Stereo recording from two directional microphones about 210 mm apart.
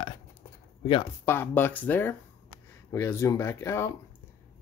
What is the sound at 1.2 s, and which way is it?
Speech, 10° left (ahead or behind).